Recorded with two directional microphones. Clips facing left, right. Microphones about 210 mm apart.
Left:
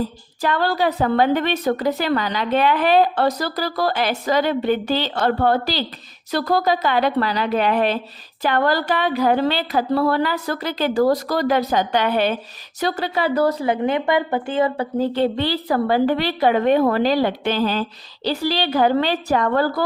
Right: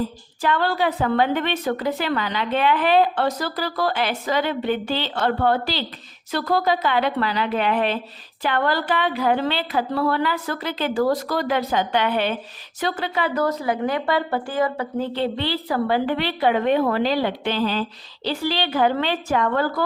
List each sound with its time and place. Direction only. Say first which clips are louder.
0.4 s a woman's voice: left 2 dB; 40° left (ahead or behind)